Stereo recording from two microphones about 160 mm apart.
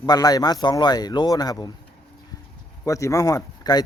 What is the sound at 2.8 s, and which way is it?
Speech, 20° left (ahead or behind).